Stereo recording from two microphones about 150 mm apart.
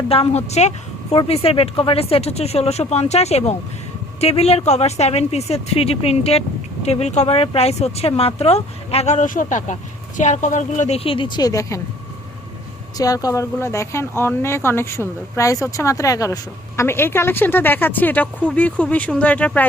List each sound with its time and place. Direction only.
0.1 s speech: 45° left (ahead or behind); by 11.8 s 25° left (ahead or behind)
13.0 s a woman's voice: 25° left (ahead or behind)